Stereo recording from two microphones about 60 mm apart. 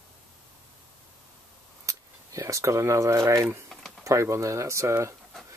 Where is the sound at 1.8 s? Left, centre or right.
Right.